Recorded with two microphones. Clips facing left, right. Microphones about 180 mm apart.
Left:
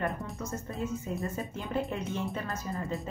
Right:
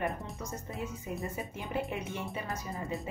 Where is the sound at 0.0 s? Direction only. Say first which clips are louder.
Left 2 dB; 15° right (ahead or behind).